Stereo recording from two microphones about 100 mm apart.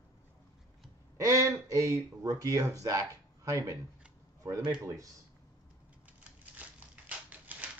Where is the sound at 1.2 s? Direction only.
30° right (ahead or behind).